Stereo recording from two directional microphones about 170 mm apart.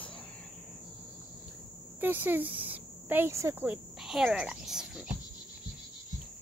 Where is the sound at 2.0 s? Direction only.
10° right (ahead or behind).